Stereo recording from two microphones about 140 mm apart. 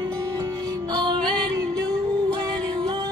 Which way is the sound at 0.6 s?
30° right (ahead or behind).